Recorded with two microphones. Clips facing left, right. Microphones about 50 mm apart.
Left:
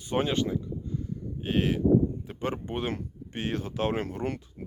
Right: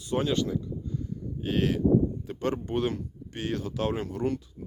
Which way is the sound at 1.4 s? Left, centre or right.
Left.